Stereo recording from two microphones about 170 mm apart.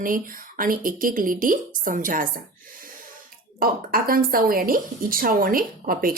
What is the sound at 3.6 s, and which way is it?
Speech, 60° right (ahead or behind).